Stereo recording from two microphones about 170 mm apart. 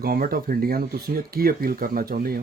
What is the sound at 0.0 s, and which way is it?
Speech, 60° right (ahead or behind).